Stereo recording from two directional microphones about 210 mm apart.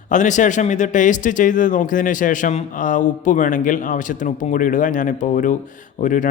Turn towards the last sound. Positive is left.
turn(degrees=40)  # may be behind; listen again after turning